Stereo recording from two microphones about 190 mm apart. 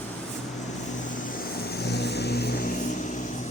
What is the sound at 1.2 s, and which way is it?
Vehicle, 50° left (ahead or behind).